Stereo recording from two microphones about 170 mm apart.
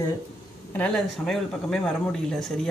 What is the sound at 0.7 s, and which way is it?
Speech, 5° left (ahead or behind).